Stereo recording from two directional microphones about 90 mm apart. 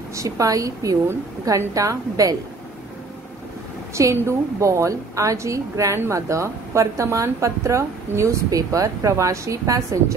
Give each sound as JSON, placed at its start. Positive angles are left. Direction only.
{"t": 0.1, "sound": "a woman's voice", "side_deg": -35}
{"t": 3.9, "sound": "a woman's voice", "side_deg": -35}